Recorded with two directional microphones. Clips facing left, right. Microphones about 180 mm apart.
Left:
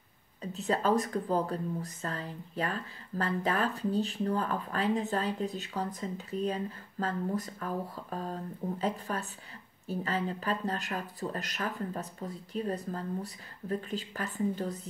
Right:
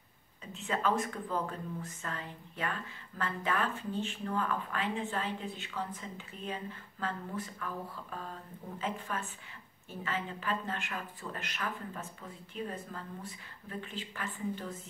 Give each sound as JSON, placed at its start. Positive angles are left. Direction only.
{"t": 0.4, "sound": "speech", "side_deg": 40}